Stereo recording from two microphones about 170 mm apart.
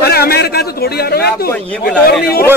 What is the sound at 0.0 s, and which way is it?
A man's voice, 65° left (ahead or behind).